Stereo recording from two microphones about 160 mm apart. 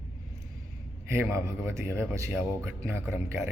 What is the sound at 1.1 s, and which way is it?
A man's voice, 15° right (ahead or behind).